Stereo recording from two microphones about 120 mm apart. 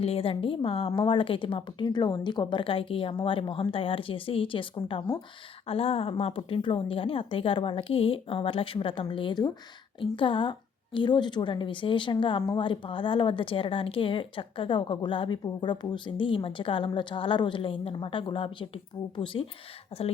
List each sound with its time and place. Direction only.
0.0 s a woman's voice: 55° left (ahead or behind)